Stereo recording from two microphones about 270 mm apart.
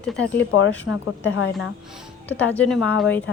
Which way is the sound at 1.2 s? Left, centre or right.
Left.